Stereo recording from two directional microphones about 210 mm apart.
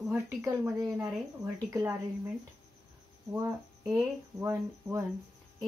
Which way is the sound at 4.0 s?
10° right (ahead or behind).